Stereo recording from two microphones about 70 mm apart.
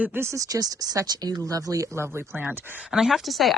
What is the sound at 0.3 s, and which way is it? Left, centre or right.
Speech, right.